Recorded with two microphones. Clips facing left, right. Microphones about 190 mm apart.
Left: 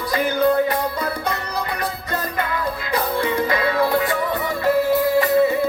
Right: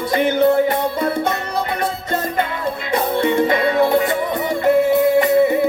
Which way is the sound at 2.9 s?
25° right (ahead or behind).